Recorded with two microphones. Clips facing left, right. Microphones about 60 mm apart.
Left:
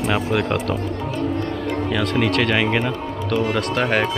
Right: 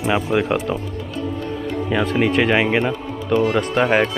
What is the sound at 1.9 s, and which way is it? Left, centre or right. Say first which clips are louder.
Speech: right 3 dB; centre.